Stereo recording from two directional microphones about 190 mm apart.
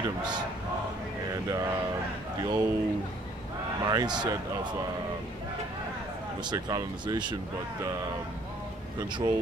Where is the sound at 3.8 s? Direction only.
20° right (ahead or behind).